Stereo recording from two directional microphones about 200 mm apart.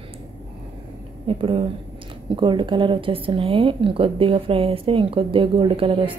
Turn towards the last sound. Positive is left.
turn(degrees=-25)  # may be behind; listen again after turning